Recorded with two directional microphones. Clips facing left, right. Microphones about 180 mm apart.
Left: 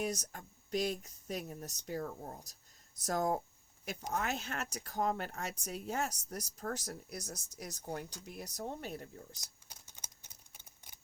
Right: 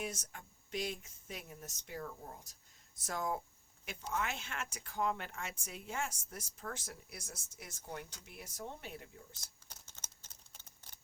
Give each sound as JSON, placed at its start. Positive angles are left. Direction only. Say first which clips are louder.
{"t": 0.0, "sound": "speech", "louder": "left 5 dB", "side_deg": 40}
{"t": 9.3, "sound": "typewriter", "louder": "left 2 dB", "side_deg": 15}